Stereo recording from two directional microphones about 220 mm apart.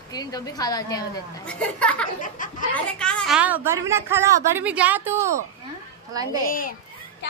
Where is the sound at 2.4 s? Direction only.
35° left (ahead or behind).